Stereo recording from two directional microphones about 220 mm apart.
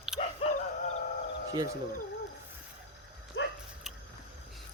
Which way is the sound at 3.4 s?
55° left (ahead or behind).